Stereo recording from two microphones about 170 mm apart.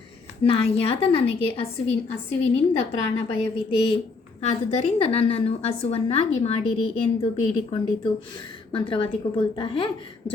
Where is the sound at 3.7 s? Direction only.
30° left (ahead or behind).